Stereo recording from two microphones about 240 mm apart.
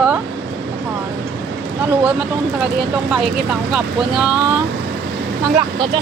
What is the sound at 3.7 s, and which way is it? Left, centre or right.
Speech, centre.